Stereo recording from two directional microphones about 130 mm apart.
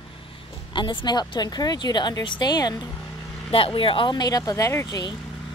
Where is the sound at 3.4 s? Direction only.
45° left (ahead or behind).